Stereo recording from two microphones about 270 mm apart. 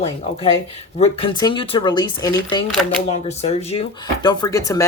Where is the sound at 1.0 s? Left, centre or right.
Centre.